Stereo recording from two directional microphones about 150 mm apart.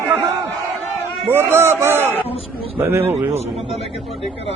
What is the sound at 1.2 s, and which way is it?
A man's voice, 15° right (ahead or behind).